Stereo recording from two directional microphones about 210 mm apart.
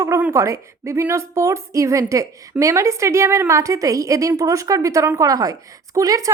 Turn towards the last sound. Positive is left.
turn(degrees=-15)  # may be behind; listen again after turning